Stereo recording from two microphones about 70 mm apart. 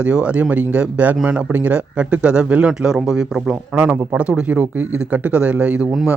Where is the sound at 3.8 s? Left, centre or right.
Centre.